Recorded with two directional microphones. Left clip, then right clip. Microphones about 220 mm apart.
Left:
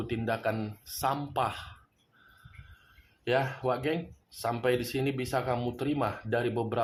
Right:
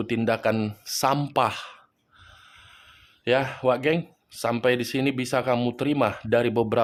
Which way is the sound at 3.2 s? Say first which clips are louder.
Right 7 dB; 40° right (ahead or behind).